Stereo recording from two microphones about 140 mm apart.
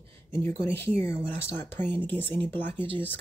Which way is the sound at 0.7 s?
15° left (ahead or behind).